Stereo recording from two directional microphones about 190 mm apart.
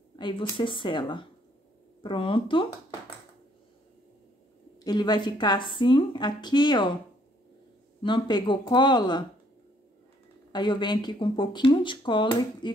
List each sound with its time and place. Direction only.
0.1 s speech: 25° left (ahead or behind)
4.7 s speech: 20° left (ahead or behind)
8.0 s speech: 25° left (ahead or behind)
10.5 s speech: 25° left (ahead or behind)